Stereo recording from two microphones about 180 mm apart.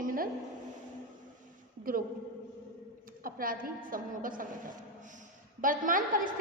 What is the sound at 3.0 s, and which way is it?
A woman's voice, 50° right (ahead or behind).